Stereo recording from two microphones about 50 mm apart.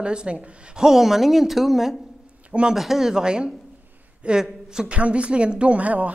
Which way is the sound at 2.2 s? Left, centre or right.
Right.